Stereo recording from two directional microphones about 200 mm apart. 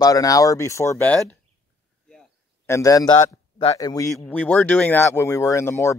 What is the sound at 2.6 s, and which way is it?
A man's voice, 15° left (ahead or behind).